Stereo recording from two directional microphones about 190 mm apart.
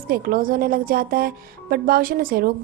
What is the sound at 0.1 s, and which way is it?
Speech, 50° right (ahead or behind).